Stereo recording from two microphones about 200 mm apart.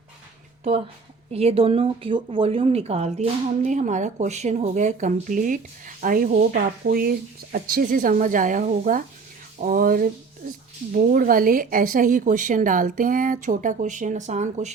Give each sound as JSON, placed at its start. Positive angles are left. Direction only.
{"t": 1.3, "sound": "speech", "side_deg": -30}
{"t": 9.6, "sound": "a sound", "side_deg": -45}
{"t": 10.9, "sound": "speech", "side_deg": -45}